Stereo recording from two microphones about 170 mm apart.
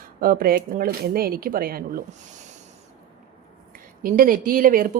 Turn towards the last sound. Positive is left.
turn(degrees=-55)  # may be behind; listen again after turning